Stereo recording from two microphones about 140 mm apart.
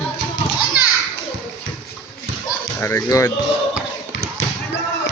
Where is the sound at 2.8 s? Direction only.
20° left (ahead or behind).